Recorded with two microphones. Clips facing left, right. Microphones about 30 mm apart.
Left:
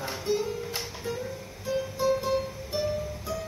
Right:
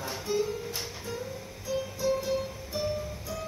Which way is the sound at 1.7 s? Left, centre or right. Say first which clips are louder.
Left 2 dB; centre.